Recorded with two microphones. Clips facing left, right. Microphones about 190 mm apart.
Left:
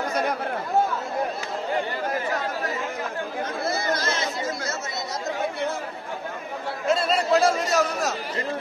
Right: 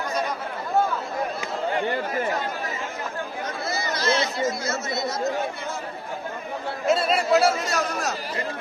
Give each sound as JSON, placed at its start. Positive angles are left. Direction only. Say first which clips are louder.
{"t": 3.6, "sound": "chatter", "louder": "right 1 dB", "side_deg": 55}
{"t": 6.9, "sound": "chatter", "louder": "right 1 dB", "side_deg": -5}